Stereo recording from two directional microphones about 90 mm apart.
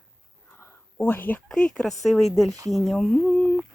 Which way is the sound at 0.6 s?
20° left (ahead or behind).